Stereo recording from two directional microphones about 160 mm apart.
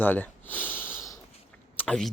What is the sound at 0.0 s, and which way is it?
Sniff, 10° left (ahead or behind).